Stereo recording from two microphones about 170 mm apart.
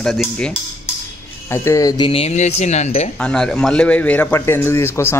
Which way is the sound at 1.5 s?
15° left (ahead or behind).